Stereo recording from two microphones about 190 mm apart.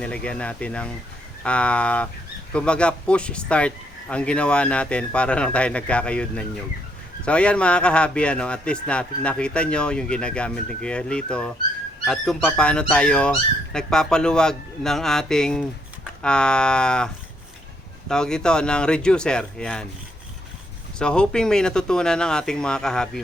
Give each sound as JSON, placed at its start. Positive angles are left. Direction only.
{"t": 0.0, "sound": "speech", "side_deg": 5}
{"t": 18.1, "sound": "speech", "side_deg": 5}
{"t": 21.0, "sound": "speech", "side_deg": 5}